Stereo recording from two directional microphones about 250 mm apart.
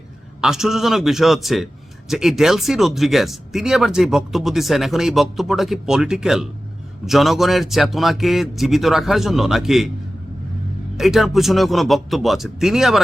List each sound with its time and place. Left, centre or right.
0.4 s speech: centre
10.9 s speech: centre